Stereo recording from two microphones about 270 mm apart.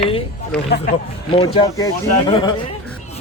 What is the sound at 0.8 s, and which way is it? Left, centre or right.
Speech, left.